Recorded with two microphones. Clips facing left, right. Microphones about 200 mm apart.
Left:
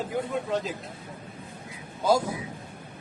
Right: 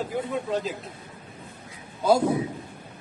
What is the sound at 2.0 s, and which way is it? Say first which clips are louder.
Speech: right 4 dB; 60° right (ahead or behind).